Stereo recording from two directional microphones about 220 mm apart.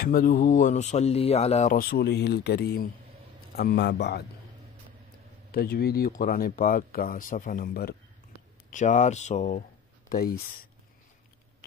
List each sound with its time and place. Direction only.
0.0 s a man's voice: 40° left (ahead or behind)
5.5 s speech: 45° left (ahead or behind)